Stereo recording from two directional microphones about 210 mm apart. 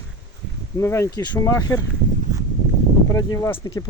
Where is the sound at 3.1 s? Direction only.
15° left (ahead or behind).